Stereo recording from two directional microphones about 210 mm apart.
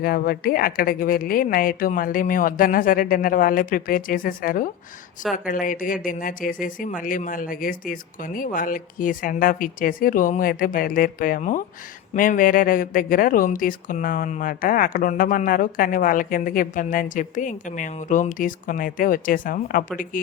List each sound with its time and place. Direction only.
0.0 s speech: 45° left (ahead or behind)